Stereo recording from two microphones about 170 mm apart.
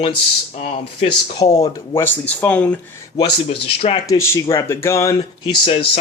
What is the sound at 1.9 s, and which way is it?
Speech, 10° left (ahead or behind).